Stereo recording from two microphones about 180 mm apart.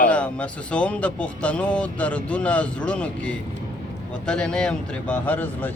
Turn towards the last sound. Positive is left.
turn(degrees=10)  # may be behind; listen again after turning